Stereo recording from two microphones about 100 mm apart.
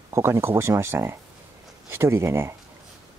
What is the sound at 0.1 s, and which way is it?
Speech, 25° right (ahead or behind).